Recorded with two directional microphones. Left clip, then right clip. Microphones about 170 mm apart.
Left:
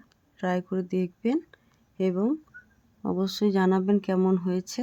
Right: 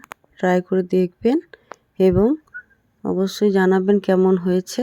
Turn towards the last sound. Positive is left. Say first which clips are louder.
# right 9 dB
turn(degrees=-30)  # may be behind; listen again after turning